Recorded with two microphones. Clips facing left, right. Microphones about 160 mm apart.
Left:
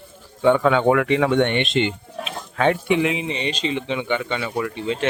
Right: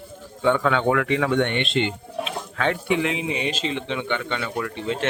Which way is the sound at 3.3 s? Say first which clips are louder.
Left 1 dB; 5° right (ahead or behind).